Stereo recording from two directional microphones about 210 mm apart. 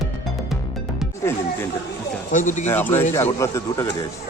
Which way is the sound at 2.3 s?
35° left (ahead or behind).